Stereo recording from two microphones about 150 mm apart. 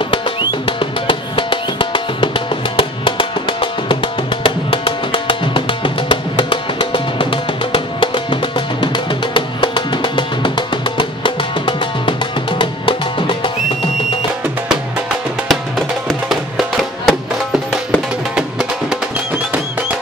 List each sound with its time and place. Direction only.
0.1 s music: 30° left (ahead or behind)
16.1 s music: centre (ahead or behind)
18.3 s music: 5° right (ahead or behind)